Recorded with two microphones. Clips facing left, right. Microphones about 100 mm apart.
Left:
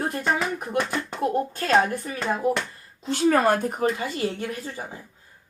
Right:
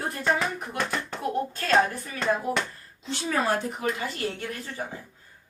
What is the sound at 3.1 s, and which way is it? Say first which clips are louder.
Speech: left 7 dB; 50° left (ahead or behind).